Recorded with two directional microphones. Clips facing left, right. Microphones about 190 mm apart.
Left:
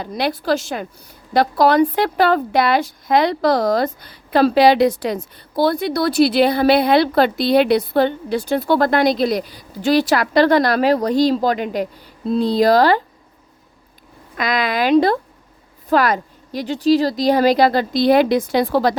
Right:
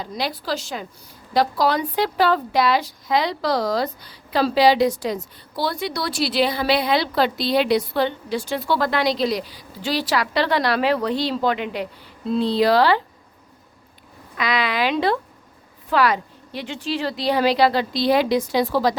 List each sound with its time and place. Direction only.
0.0 s a woman's voice: 55° left (ahead or behind)
14.3 s a woman's voice: 45° left (ahead or behind)